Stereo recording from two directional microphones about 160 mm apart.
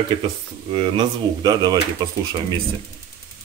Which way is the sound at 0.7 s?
30° right (ahead or behind).